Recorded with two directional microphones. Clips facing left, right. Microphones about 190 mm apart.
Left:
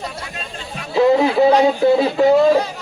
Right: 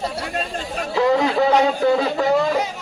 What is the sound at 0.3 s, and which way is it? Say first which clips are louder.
Speech: right 6 dB; 45° right (ahead or behind).